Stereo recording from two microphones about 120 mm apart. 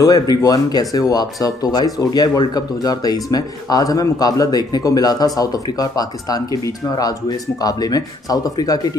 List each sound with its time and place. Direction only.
0.0 s speech: 30° left (ahead or behind)